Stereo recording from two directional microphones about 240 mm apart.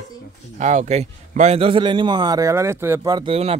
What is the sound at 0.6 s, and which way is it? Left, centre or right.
A man's voice, right.